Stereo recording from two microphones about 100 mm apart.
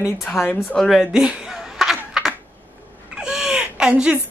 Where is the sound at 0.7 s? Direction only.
5° left (ahead or behind).